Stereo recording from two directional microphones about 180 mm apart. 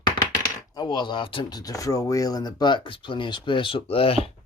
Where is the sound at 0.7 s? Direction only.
20° left (ahead or behind).